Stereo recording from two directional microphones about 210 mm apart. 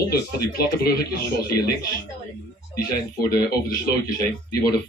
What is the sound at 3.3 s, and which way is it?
Speech, 45° left (ahead or behind).